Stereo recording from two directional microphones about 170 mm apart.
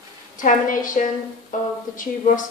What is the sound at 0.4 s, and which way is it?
A woman's voice, 50° left (ahead or behind).